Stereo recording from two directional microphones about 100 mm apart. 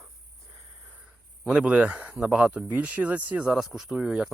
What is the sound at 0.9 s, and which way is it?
Speech, 10° right (ahead or behind).